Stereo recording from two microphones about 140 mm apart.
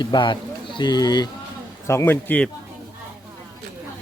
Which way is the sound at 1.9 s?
20° left (ahead or behind).